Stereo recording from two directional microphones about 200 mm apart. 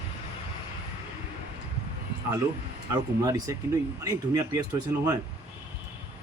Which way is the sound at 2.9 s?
15° right (ahead or behind).